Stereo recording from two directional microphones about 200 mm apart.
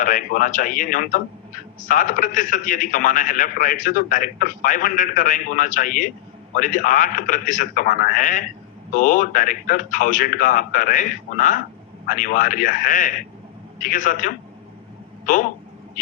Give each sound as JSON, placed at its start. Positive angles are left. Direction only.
{"t": 0.0, "sound": "a man's voice", "side_deg": 40}